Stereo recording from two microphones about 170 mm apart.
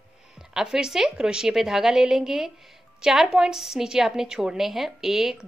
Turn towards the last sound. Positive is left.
turn(degrees=0)  # may be behind; listen again after turning